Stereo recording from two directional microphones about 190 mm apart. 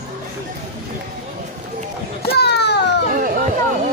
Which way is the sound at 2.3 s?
60° left (ahead or behind).